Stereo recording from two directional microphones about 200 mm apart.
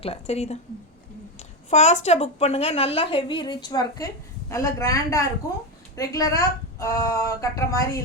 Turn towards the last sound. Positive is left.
turn(degrees=15)  # may be behind; listen again after turning